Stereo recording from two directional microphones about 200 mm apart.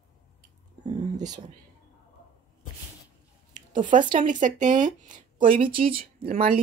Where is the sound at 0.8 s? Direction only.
20° right (ahead or behind).